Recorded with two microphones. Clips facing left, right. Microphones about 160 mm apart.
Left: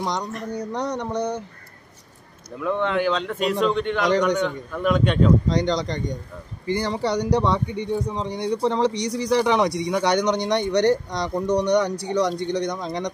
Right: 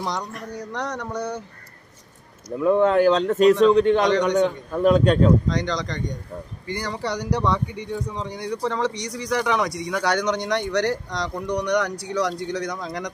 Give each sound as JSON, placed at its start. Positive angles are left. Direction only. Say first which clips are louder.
{"t": 0.0, "sound": "speech", "louder": "left 2 dB", "side_deg": 20}
{"t": 0.3, "sound": "speech", "louder": "left 4 dB", "side_deg": -5}
{"t": 0.9, "sound": "speech", "louder": "left 3 dB", "side_deg": 20}
{"t": 2.6, "sound": "a man's voice", "louder": "right 6 dB", "side_deg": -40}
{"t": 5.5, "sound": "speech", "louder": "left 3 dB", "side_deg": 30}
{"t": 10.6, "sound": "speech", "louder": "left 4 dB", "side_deg": 0}
{"t": 11.5, "sound": "speech", "louder": "left 3 dB", "side_deg": 25}
{"t": 11.9, "sound": "speech", "louder": "left 3 dB", "side_deg": 0}
{"t": 12.6, "sound": "speech", "louder": "left 3 dB", "side_deg": 25}